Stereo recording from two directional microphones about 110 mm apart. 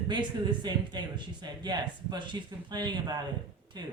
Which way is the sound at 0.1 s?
40° right (ahead or behind).